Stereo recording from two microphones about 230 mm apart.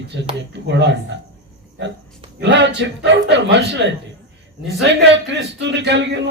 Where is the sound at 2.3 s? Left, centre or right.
Right.